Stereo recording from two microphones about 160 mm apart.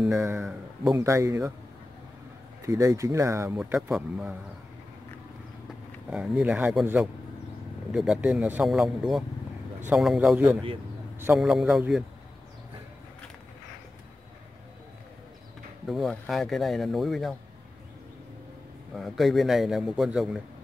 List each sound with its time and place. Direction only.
0.1 s speech: 15° right (ahead or behind)
0.4 s speech: centre (ahead or behind)
0.9 s speech: 20° right (ahead or behind)
2.6 s speech: 20° right (ahead or behind)
6.0 s speech: 10° right (ahead or behind)
15.9 s speech: centre (ahead or behind)
18.9 s speech: centre (ahead or behind)